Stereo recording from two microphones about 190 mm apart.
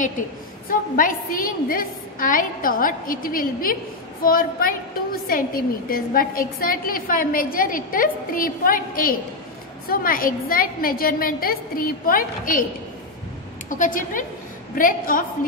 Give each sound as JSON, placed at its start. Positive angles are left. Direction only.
{"t": 0.7, "sound": "a woman's voice", "side_deg": 45}
{"t": 13.7, "sound": "a woman's voice", "side_deg": 45}